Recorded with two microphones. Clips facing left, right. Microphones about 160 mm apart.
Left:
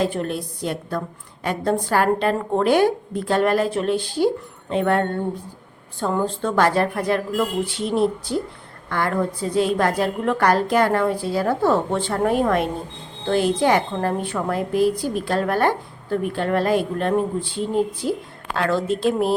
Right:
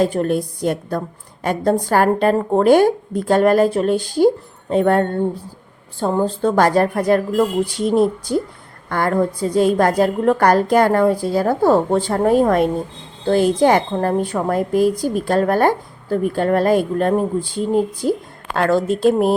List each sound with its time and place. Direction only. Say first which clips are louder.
0.0 s a woman's voice: right 6 dB; 45° right (ahead or behind)